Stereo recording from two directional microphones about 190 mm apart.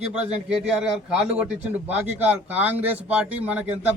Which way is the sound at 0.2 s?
5° right (ahead or behind).